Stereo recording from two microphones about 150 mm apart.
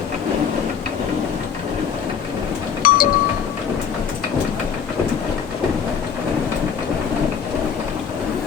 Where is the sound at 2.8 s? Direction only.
75° left (ahead or behind).